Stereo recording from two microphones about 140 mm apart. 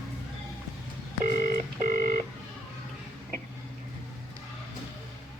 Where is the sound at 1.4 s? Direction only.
85° right.